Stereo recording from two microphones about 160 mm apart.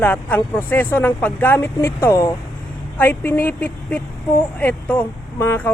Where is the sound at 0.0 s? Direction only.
10° left (ahead or behind).